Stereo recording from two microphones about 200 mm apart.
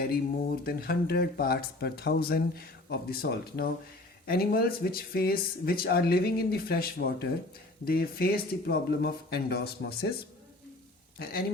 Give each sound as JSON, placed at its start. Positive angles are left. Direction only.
{"t": 0.6, "sound": "speech", "side_deg": 50}
{"t": 11.2, "sound": "speech", "side_deg": 50}